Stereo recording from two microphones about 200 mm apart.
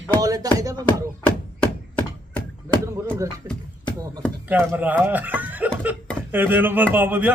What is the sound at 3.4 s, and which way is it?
Speech, 20° right (ahead or behind).